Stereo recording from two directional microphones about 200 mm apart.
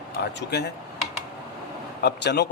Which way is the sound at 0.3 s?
60° left (ahead or behind).